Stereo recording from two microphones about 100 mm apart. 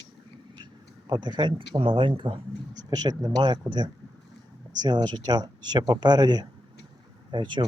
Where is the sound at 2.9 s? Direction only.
40° right (ahead or behind).